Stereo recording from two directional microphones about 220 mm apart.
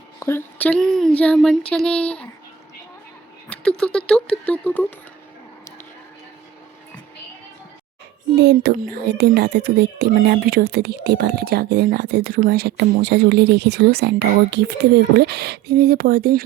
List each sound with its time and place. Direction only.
0.2 s speech: 10° left (ahead or behind)
3.5 s speech: 5° left (ahead or behind)
8.4 s speech: 45° right (ahead or behind)